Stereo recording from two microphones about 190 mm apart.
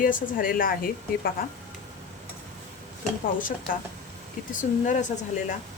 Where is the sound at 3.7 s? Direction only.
50° left (ahead or behind).